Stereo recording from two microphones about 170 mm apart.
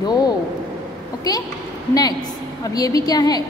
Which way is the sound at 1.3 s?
20° left (ahead or behind).